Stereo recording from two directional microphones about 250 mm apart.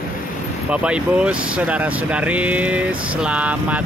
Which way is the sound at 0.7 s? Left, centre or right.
Centre.